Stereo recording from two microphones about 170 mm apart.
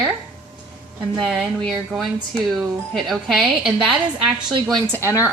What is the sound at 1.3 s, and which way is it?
A woman's voice, centre (ahead or behind).